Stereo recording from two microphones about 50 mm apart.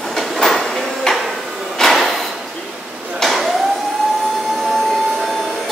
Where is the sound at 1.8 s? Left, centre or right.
Centre.